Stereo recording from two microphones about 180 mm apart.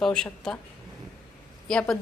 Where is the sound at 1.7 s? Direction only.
5° left (ahead or behind).